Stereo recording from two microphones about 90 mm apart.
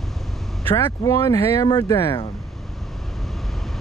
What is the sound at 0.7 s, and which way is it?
Speech, 35° left (ahead or behind).